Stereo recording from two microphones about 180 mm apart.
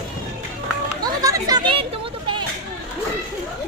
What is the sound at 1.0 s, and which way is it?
Chatter, 20° right (ahead or behind).